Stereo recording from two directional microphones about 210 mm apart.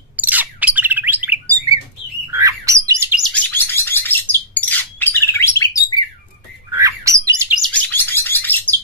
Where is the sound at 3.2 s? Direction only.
10° left (ahead or behind).